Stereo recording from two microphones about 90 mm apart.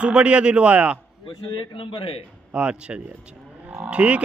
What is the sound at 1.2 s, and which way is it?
Speech, 70° left (ahead or behind).